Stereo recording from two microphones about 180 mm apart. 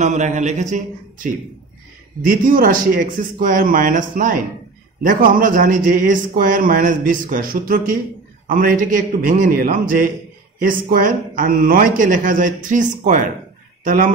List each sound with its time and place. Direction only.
0.0 s a man's voice: 40° right (ahead or behind)